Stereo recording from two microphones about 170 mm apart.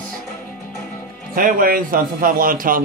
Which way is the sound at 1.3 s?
55° right (ahead or behind).